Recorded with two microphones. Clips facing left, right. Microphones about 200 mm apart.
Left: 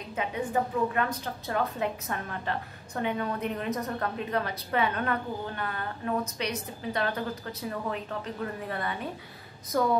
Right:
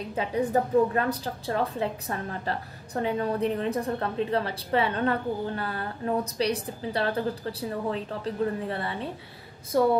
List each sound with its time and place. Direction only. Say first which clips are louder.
0.1 s a woman's voice: right 4 dB; 35° right (ahead or behind)